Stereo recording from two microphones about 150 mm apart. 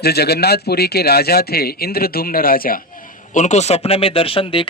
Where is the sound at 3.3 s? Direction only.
50° left (ahead or behind).